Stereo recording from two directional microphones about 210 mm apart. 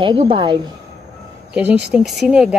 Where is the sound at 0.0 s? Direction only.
25° right (ahead or behind).